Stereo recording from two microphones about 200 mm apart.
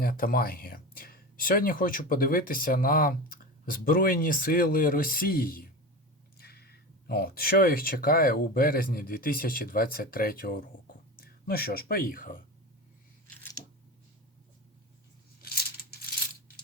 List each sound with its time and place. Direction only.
0.0 s speech: 45° left (ahead or behind)
13.3 s scissors: 10° left (ahead or behind)